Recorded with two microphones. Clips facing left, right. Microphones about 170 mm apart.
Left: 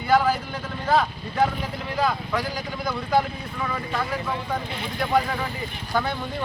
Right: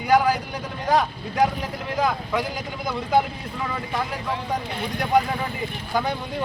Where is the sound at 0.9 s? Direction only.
15° right (ahead or behind).